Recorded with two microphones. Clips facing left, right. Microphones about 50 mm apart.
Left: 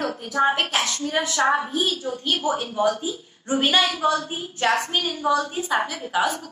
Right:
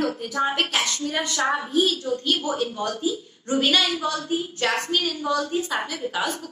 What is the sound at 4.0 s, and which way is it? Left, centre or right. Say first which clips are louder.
A woman's voice: left 3 dB; left.